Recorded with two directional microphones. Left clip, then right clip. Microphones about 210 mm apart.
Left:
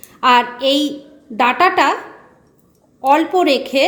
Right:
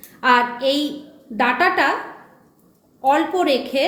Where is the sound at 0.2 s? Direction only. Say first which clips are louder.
Left 3 dB; 30° left (ahead or behind).